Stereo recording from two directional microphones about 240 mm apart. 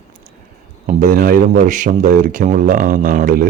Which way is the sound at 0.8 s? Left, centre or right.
Right.